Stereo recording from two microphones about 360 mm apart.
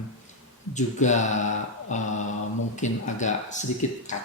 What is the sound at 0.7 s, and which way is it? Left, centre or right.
Speech, centre.